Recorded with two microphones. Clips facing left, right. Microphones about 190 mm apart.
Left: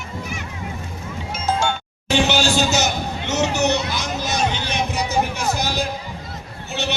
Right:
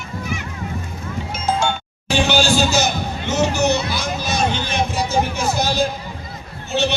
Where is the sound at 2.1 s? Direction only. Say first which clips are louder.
Right 1 dB; 20° left (ahead or behind).